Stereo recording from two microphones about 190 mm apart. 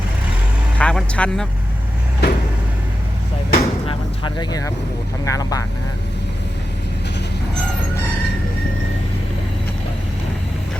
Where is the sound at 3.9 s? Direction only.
25° left (ahead or behind).